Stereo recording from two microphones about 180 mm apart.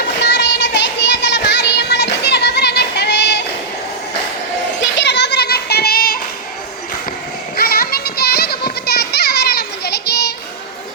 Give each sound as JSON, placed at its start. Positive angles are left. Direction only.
{"t": 0.2, "sound": "child singing", "side_deg": 75}
{"t": 4.8, "sound": "children playing", "side_deg": 70}
{"t": 7.5, "sound": "children playing", "side_deg": 55}